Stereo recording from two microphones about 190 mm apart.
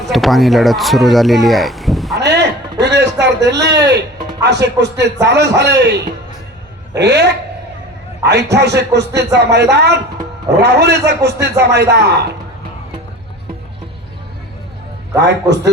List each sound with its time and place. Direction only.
0.1 s speech: centre (ahead or behind)
2.1 s a sound: 60° right (ahead or behind)
4.4 s speech: 65° right (ahead or behind)
15.2 s speech: 65° right (ahead or behind)